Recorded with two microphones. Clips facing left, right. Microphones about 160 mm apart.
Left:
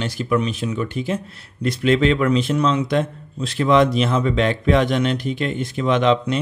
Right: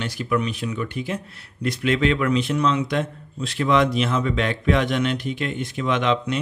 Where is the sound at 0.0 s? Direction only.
30° left (ahead or behind).